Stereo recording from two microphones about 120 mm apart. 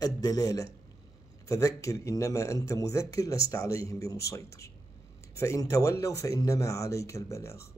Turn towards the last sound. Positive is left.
turn(degrees=25)  # may be behind; listen again after turning